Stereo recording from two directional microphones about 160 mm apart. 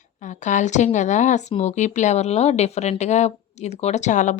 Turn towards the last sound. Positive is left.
turn(degrees=50)  # may be behind; listen again after turning